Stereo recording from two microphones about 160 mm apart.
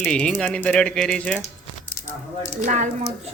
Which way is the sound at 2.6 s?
50° right (ahead or behind).